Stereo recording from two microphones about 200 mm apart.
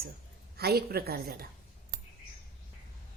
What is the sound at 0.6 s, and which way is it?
Speech, 50° right (ahead or behind).